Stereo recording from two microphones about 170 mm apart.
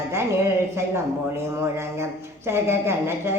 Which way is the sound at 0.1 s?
15° right (ahead or behind).